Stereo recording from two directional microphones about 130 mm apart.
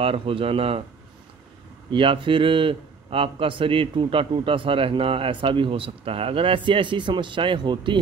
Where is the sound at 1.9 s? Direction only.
40° right (ahead or behind).